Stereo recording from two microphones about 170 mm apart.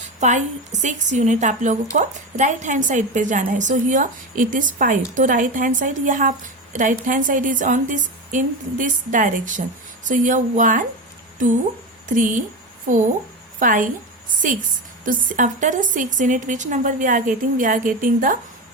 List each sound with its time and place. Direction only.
0.2 s a woman's voice: 45° right (ahead or behind)
12.0 s a woman's voice: 50° right (ahead or behind)
15.0 s a woman's voice: 50° right (ahead or behind)